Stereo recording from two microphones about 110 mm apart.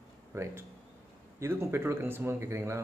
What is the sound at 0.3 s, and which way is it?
A man's voice, 20° right (ahead or behind).